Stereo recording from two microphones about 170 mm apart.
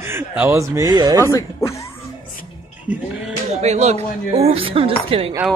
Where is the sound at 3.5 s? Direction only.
40° right (ahead or behind).